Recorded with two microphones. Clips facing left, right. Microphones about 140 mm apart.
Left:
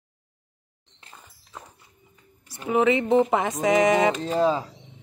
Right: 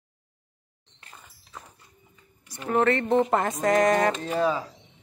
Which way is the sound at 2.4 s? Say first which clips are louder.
Left 2 dB; 5° left (ahead or behind).